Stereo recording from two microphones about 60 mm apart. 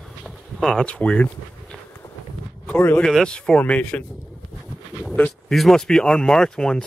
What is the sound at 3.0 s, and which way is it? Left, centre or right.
Speech, centre.